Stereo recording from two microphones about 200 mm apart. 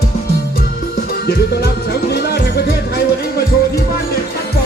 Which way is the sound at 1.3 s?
50° left (ahead or behind).